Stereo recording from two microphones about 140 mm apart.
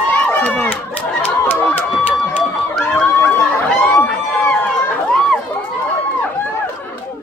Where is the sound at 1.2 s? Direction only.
15° left (ahead or behind).